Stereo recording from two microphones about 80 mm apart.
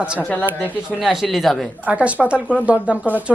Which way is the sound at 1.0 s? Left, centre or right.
Centre.